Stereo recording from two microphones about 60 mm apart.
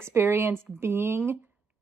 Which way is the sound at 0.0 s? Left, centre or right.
Right.